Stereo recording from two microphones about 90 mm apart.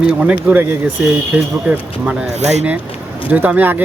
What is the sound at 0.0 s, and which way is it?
Speech, 10° right (ahead or behind).